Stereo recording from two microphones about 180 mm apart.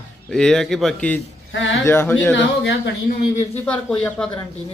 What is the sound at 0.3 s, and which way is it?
Speech, 5° left (ahead or behind).